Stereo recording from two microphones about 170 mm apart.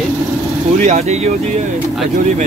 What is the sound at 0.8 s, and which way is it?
Speech, 40° right (ahead or behind).